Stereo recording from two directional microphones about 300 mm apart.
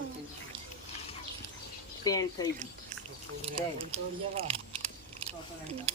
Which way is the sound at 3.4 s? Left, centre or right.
Centre.